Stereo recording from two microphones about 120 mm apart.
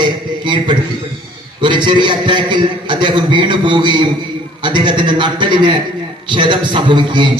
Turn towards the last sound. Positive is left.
turn(degrees=-40)  # may be behind; listen again after turning